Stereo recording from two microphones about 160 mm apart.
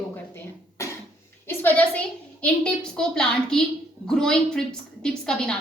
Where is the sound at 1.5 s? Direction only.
10° left (ahead or behind).